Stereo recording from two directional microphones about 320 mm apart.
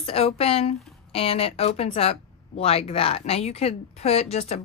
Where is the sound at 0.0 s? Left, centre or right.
Centre.